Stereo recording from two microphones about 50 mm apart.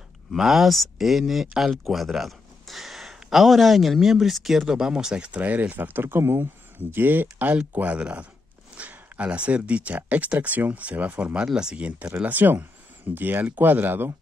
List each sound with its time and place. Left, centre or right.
0.3 s speech: centre
4.7 s speech: centre
5.4 s speech: right
11.4 s speech: centre
12.2 s speech: right